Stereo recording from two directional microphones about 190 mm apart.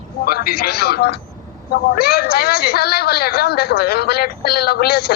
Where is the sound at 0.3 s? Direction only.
55° left (ahead or behind).